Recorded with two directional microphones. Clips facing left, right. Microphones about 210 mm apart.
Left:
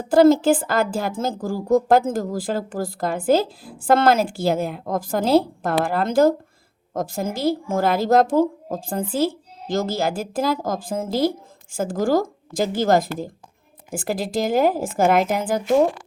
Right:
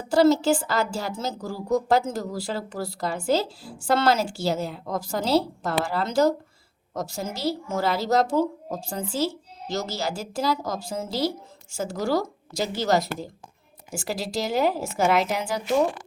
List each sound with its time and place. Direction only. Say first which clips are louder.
0.1 s a woman's voice: left 5 dB; 50° left (ahead or behind)